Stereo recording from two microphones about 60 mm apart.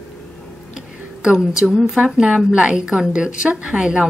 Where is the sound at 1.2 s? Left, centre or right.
Centre.